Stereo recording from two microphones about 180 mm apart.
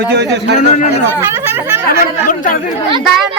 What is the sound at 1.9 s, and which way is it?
Speech, 50° left (ahead or behind).